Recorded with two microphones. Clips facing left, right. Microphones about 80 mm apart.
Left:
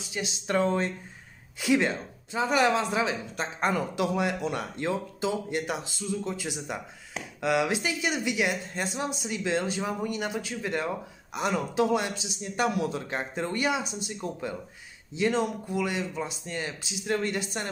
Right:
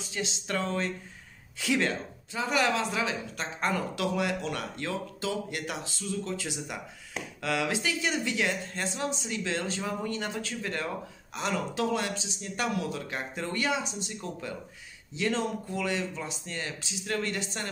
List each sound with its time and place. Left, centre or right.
0.2 s a woman's voice: left